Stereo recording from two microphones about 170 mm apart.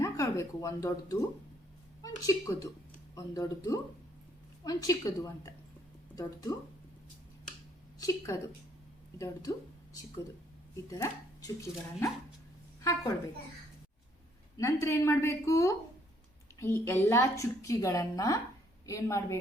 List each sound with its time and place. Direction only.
0.0 s a woman's voice: 20° left (ahead or behind)
7.9 s a woman's voice: 20° left (ahead or behind)
12.8 s a woman's voice: 20° left (ahead or behind)
14.6 s a woman's voice: 15° left (ahead or behind)